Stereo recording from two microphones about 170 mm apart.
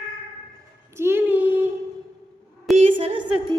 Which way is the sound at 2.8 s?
35° right (ahead or behind).